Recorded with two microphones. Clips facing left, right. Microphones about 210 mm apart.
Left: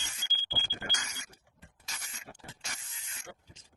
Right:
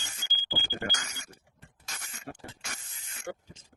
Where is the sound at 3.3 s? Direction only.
50° right (ahead or behind).